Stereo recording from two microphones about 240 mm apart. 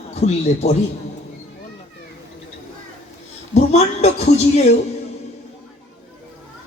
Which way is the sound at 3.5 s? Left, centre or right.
Left.